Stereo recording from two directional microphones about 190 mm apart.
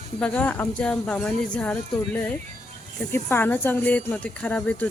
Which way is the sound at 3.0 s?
10° left (ahead or behind).